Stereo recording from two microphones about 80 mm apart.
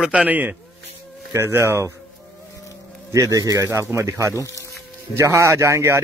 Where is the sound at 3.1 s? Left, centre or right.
Right.